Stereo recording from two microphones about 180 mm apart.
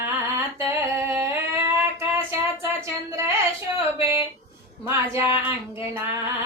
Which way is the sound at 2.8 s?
15° right (ahead or behind).